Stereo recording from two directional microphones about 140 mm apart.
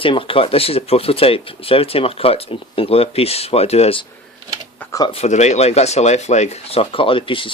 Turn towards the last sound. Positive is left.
turn(degrees=40)  # may be behind; listen again after turning